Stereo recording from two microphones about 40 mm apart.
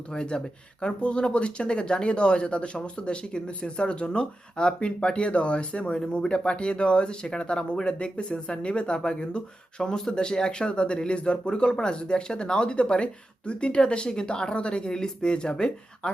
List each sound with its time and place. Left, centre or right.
0.1 s speech: left